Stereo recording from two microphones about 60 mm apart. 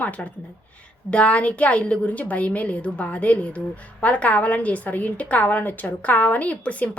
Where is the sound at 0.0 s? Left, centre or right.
Left.